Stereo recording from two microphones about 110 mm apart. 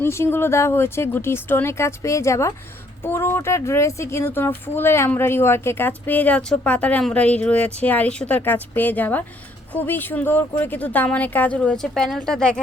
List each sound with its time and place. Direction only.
0.0 s speech: 25° left (ahead or behind); by 12.5 s 5° left (ahead or behind)